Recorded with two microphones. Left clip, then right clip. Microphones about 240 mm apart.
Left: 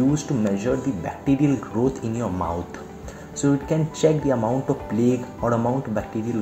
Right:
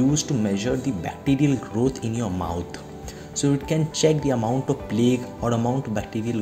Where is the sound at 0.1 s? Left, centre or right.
Right.